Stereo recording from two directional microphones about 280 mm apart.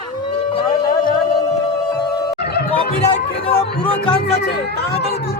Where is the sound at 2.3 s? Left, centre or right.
Left.